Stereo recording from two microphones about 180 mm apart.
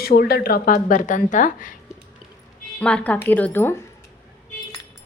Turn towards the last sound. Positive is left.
turn(degrees=10)  # may be behind; listen again after turning